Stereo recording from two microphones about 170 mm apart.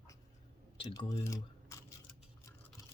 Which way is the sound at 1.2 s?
20° left (ahead or behind).